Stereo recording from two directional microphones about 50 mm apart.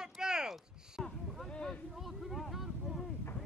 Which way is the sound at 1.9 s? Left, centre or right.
Centre.